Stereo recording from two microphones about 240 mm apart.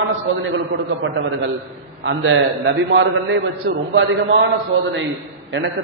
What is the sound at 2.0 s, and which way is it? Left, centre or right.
A man's voice, right.